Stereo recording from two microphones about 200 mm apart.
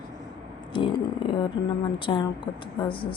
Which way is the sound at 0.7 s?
25° left (ahead or behind).